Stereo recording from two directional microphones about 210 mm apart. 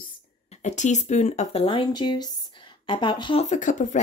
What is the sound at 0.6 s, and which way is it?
Speech, 35° left (ahead or behind).